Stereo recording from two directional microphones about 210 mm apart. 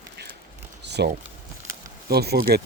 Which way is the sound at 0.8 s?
55° right (ahead or behind).